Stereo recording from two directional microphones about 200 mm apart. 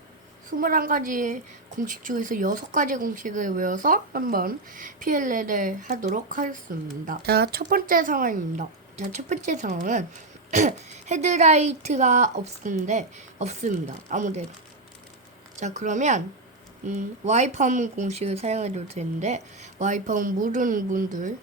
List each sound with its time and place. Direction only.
0.5 s a woman's voice: 45° right (ahead or behind)
15.6 s a woman's voice: 35° right (ahead or behind)